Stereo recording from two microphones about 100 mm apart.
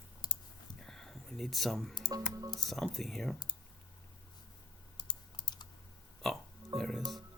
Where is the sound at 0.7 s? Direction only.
5° left (ahead or behind).